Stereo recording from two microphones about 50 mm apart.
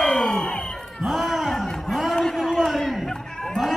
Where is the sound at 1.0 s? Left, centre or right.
Centre.